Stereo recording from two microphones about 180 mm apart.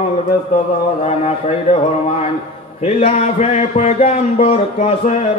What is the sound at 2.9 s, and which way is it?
A man's voice, 40° left (ahead or behind).